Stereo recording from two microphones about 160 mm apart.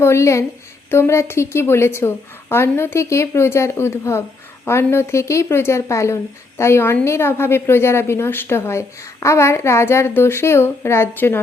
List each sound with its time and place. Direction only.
0.0 s a woman's voice: 15° left (ahead or behind)